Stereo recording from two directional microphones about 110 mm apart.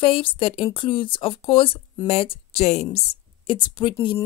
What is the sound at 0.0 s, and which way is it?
Speech, 55° left (ahead or behind).